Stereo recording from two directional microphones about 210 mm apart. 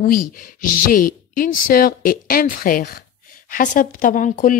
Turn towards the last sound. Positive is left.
turn(degrees=40)  # may be behind; listen again after turning